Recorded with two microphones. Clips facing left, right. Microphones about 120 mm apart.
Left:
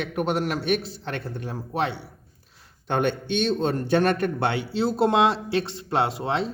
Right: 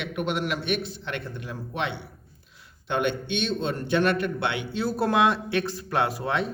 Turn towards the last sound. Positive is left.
turn(degrees=30)  # may be behind; listen again after turning